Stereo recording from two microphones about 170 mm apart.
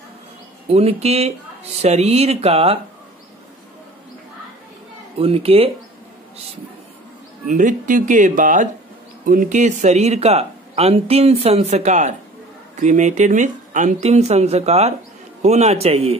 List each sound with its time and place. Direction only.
0.7 s speech: 35° right (ahead or behind)
5.2 s speech: 35° right (ahead or behind)
7.4 s speech: 50° right (ahead or behind)